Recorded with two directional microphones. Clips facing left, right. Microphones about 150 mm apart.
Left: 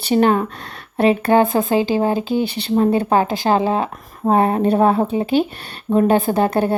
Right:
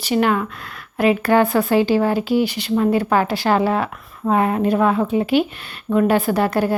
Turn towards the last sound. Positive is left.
turn(degrees=25)  # may be behind; listen again after turning